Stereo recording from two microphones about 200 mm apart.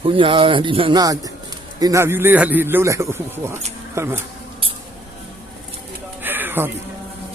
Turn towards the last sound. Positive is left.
turn(degrees=-10)  # may be behind; listen again after turning